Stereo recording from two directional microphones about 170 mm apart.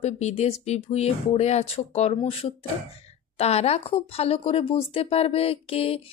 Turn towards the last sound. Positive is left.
turn(degrees=35)  # may be behind; listen again after turning